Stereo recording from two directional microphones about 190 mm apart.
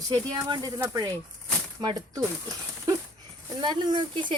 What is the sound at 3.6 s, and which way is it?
Speech, 20° right (ahead or behind).